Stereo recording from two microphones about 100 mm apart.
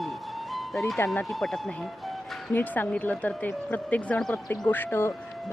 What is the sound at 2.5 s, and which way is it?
Speech, 20° left (ahead or behind).